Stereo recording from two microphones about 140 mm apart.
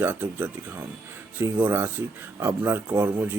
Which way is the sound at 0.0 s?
15° right (ahead or behind).